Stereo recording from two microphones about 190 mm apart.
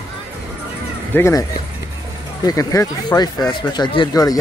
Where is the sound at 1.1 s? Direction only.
15° left (ahead or behind).